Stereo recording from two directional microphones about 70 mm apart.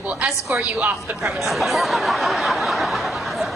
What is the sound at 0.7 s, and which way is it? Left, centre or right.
Speech, centre.